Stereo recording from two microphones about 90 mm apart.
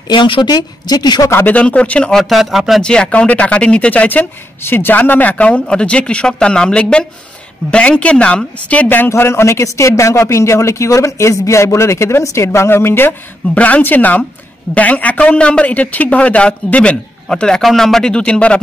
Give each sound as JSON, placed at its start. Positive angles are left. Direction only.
{"t": 0.1, "sound": "speech", "side_deg": 60}
{"t": 1.3, "sound": "speech", "side_deg": 20}
{"t": 2.8, "sound": "speech", "side_deg": 10}